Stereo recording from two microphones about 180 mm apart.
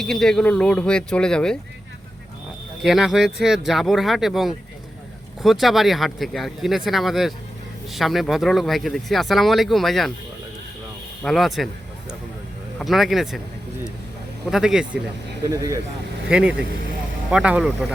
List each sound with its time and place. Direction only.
0.0 s speech: centre (ahead or behind)
2.8 s speech: centre (ahead or behind)
11.2 s speech: centre (ahead or behind)
12.8 s speech: centre (ahead or behind)
14.5 s speech: 5° right (ahead or behind)
15.4 s speech: 20° right (ahead or behind)
16.3 s speech: 5° right (ahead or behind)